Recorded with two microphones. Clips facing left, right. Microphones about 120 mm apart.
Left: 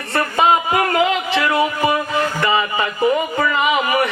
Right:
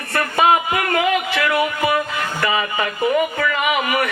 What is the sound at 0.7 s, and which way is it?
Music, 25° left (ahead or behind).